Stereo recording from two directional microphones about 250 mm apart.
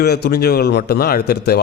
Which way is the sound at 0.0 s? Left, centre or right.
Left.